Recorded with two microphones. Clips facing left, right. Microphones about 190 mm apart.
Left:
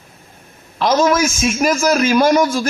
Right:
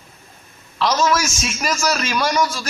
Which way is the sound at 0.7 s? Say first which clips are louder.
Left 4 dB; 50° left (ahead or behind).